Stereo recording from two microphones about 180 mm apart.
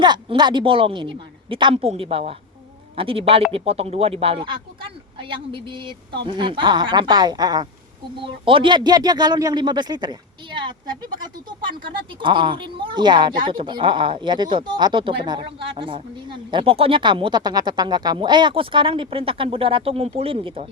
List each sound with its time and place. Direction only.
0.0 s a woman's voice: 25° right (ahead or behind)
12.2 s speech: 25° right (ahead or behind)